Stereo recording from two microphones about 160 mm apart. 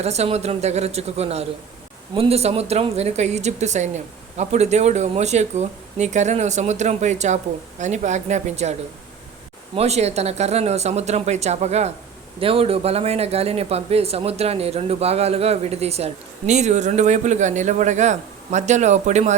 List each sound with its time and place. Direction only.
0.0 s a woman's voice: 40° right (ahead or behind)
9.7 s a woman's voice: 40° right (ahead or behind)